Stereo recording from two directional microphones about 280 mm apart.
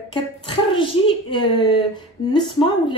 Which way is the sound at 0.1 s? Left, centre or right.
Centre.